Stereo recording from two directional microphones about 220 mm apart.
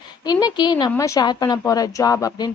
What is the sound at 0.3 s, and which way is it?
Speech, 20° left (ahead or behind).